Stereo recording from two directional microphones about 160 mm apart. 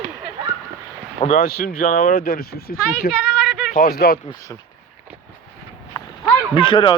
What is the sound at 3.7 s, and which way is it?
Speech, 70° left (ahead or behind).